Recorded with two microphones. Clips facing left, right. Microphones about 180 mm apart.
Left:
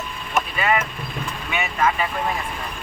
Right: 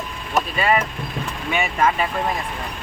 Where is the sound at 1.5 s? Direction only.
30° right (ahead or behind).